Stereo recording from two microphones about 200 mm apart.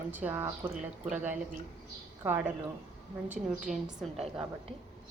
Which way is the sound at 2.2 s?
10° right (ahead or behind).